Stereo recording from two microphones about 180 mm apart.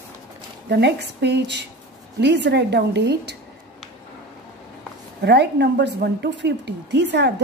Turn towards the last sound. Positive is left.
turn(degrees=-70)  # may be behind; listen again after turning